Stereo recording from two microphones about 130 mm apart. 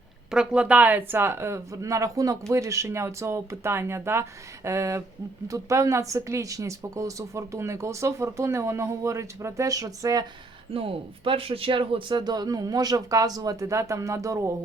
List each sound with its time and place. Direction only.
0.3 s speech: 5° right (ahead or behind); by 10.2 s 25° right (ahead or behind)
10.8 s speech: 45° right (ahead or behind); by 14.5 s 25° right (ahead or behind)